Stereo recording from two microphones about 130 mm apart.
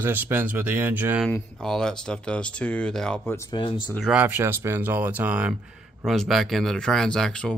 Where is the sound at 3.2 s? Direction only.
20° left (ahead or behind).